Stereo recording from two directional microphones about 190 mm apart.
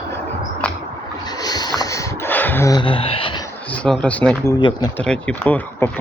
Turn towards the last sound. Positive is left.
turn(degrees=10)  # may be behind; listen again after turning